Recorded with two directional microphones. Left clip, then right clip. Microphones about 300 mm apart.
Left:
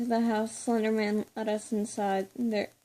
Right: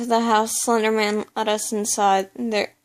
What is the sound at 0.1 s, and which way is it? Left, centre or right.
Speech, right.